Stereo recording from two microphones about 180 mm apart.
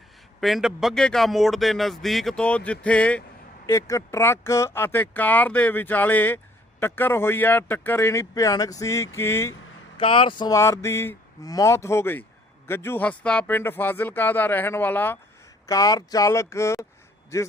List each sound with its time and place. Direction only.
0.3 s speech: centre (ahead or behind)
3.7 s speech: 15° left (ahead or behind)
10.0 s speech: 30° left (ahead or behind)